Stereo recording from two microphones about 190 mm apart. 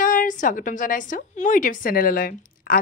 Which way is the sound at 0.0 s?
45° left (ahead or behind).